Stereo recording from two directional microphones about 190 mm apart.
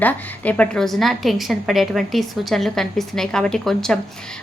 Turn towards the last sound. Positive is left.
turn(degrees=0)  # may be behind; listen again after turning